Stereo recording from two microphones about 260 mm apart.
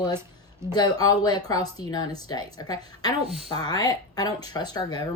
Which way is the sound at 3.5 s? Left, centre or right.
Centre.